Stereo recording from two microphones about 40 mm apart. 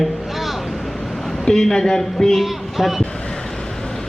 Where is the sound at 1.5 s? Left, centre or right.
Centre.